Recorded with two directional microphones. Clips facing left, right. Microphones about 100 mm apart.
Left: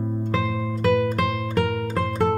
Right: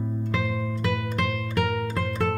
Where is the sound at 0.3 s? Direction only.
25° left (ahead or behind).